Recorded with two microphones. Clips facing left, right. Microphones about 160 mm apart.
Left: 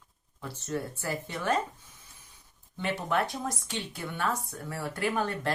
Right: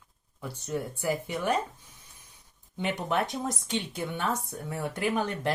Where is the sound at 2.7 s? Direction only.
20° right (ahead or behind).